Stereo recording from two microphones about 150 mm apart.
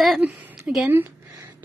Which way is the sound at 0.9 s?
15° right (ahead or behind).